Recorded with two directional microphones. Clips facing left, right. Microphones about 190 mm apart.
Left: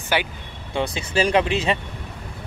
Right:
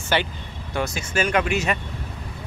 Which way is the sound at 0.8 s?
30° left (ahead or behind).